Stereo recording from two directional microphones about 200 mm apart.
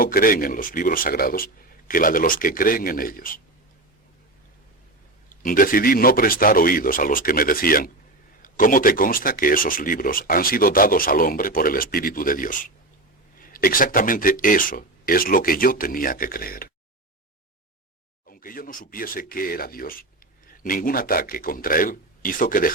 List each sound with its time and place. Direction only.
0.0 s speech: 45° left (ahead or behind)
5.3 s speech: 45° left (ahead or behind)
18.3 s speech: 45° left (ahead or behind)